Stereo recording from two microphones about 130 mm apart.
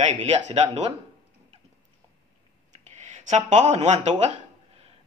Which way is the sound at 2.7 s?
65° right (ahead or behind).